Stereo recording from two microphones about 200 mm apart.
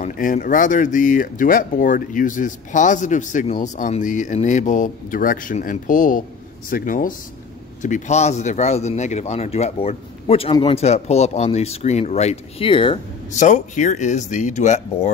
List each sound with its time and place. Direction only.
0.0 s speech: 45° left (ahead or behind); by 13.4 s 25° left (ahead or behind)
13.4 s speech: 40° left (ahead or behind)